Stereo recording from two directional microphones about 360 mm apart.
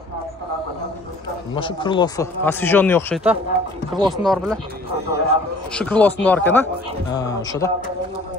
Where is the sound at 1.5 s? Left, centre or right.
Centre.